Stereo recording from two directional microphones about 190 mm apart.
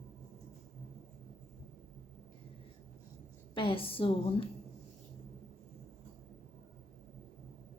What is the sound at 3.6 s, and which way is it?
Speech, 30° left (ahead or behind).